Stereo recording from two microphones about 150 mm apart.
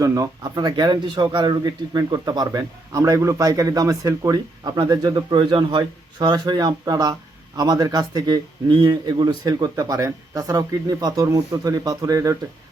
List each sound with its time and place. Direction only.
0.0 s speech: 25° right (ahead or behind)